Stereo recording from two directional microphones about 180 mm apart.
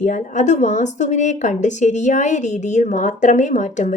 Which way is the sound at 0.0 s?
45° left (ahead or behind).